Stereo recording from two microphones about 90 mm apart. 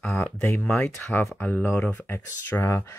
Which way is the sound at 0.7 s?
10° left (ahead or behind).